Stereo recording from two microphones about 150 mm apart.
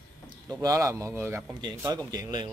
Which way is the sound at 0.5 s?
20° right (ahead or behind).